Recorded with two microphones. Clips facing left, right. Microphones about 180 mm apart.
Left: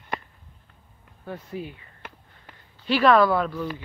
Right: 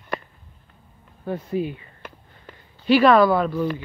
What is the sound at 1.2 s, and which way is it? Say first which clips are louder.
Speech: right 9 dB; 20° right (ahead or behind).